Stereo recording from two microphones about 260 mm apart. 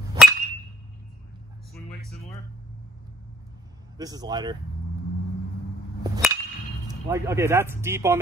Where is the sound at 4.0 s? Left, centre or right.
Centre.